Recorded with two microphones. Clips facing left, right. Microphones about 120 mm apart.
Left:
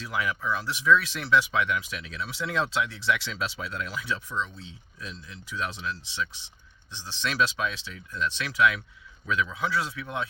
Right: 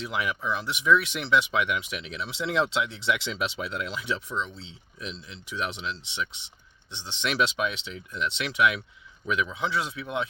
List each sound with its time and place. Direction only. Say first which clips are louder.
0.0 s speech: even; 20° right (ahead or behind)